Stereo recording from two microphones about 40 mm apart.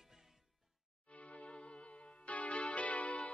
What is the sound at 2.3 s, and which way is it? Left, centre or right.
Music, left.